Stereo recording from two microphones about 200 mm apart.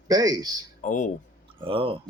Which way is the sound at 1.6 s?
25° right (ahead or behind).